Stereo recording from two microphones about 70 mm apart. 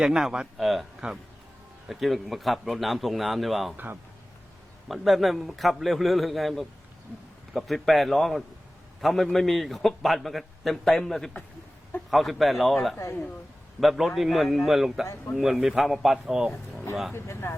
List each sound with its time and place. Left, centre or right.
0.0 s a man's voice: centre
1.9 s a man's voice: centre
4.9 s a man's voice: centre
17.1 s speech: left